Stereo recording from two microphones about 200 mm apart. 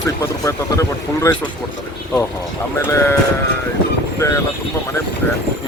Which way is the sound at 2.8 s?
15° left (ahead or behind).